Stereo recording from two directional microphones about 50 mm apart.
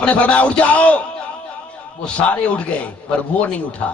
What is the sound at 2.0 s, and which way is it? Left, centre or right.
Speech, left.